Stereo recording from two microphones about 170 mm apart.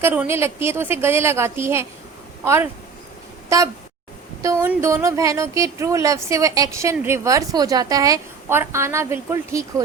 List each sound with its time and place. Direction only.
0.0 s a woman's voice: 10° right (ahead or behind)
4.4 s a woman's voice: 15° right (ahead or behind)